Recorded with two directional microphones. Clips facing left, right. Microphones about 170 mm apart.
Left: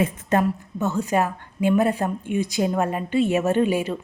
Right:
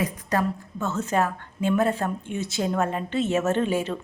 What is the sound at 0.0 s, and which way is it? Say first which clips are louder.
A woman's voice: left 4 dB; 25° left (ahead or behind).